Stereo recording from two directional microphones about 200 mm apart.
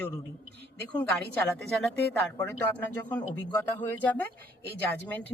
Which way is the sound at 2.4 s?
10° left (ahead or behind).